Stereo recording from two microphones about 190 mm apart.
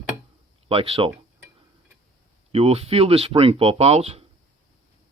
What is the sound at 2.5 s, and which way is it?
Speech, 30° right (ahead or behind).